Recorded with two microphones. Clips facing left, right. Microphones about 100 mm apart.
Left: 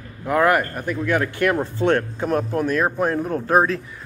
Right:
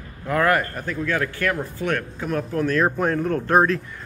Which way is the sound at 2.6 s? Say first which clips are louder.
Even; 15° left (ahead or behind).